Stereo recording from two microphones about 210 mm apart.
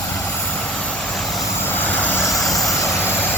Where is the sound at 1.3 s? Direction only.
10° left (ahead or behind).